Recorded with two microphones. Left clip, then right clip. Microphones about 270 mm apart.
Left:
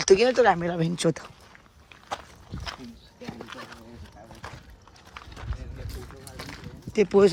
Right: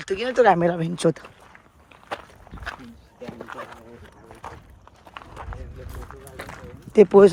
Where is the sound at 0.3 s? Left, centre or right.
Centre.